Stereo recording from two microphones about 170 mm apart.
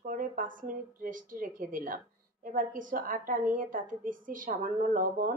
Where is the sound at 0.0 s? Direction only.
55° right (ahead or behind).